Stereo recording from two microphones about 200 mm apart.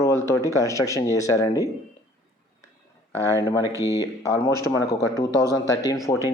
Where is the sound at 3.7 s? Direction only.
15° right (ahead or behind).